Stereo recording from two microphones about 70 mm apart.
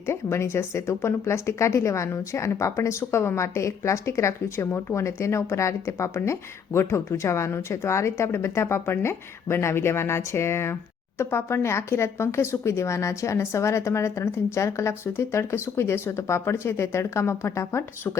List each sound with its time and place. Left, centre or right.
0.1 s a woman's voice: left